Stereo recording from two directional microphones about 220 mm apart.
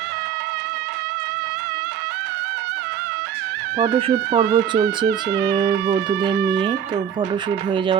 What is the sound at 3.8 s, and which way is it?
Speech, 25° right (ahead or behind).